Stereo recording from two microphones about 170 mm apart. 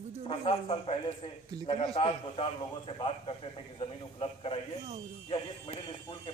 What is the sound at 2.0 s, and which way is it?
Speech, 30° left (ahead or behind).